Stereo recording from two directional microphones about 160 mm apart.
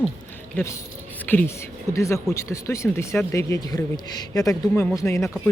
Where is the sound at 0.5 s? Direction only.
15° left (ahead or behind).